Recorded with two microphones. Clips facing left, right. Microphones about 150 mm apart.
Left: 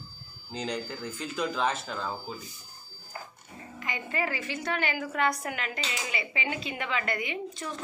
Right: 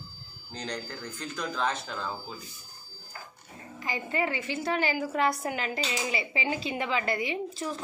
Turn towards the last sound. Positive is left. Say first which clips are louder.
# right 3 dB
turn(degrees=-30)  # may be behind; listen again after turning